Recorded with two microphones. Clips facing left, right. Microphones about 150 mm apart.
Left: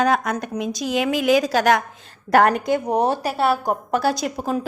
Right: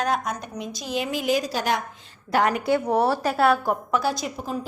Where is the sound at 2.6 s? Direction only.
15° left (ahead or behind).